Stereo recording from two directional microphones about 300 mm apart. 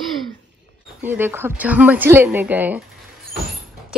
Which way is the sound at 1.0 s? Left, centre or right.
Centre.